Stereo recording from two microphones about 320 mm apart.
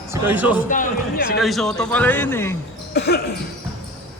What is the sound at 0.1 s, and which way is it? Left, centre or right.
Speech, centre.